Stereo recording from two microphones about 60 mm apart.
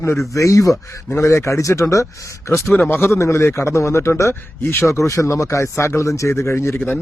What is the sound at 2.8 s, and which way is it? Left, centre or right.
Speech, left.